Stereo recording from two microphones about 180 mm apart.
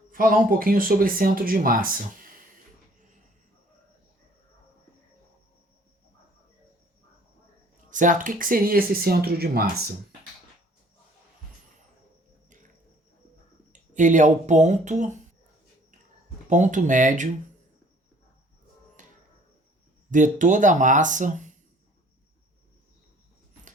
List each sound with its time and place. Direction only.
0.1 s speech: 50° right (ahead or behind)
7.9 s speech: 45° right (ahead or behind)
13.9 s speech: 45° right (ahead or behind)
16.5 s speech: 45° right (ahead or behind)
19.0 s a sound: 45° right (ahead or behind)
20.1 s speech: 45° right (ahead or behind)